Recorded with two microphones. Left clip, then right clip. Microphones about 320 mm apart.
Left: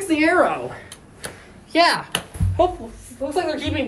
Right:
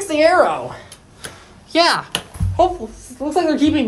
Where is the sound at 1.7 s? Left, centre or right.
Right.